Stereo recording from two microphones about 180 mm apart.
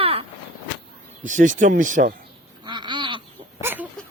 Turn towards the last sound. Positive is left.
turn(degrees=-10)  # may be behind; listen again after turning